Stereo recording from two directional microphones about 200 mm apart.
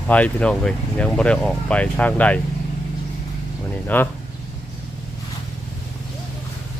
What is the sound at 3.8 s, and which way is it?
Speech, 10° left (ahead or behind).